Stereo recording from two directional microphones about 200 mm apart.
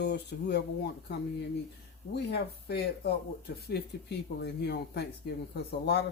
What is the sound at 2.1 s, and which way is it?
Speech, 55° left (ahead or behind).